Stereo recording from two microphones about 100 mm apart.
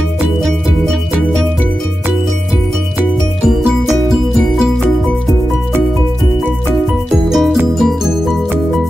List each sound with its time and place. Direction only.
7.3 s music: centre (ahead or behind)